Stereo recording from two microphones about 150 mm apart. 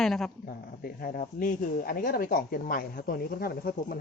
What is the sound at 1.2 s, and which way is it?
Speech, 60° left (ahead or behind).